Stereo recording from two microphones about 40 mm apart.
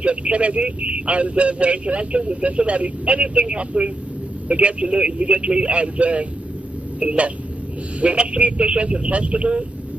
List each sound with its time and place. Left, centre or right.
0.0 s a man's voice: right